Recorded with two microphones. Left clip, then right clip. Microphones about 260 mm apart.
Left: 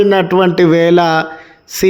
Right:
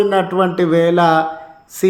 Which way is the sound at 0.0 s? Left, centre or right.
Left.